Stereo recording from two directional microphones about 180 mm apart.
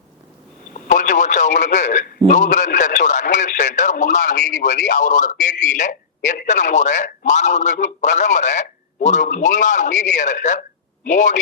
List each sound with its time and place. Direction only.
0.7 s a man's voice: 45° left (ahead or behind)